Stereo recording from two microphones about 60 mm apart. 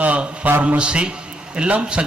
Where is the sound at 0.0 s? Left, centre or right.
Right.